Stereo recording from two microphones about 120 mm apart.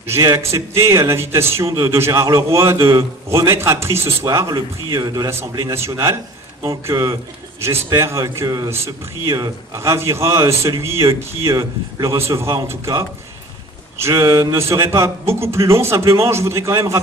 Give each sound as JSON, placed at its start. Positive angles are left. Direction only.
{"t": 0.0, "sound": "a man's voice", "side_deg": -20}
{"t": 13.9, "sound": "a man's voice", "side_deg": -25}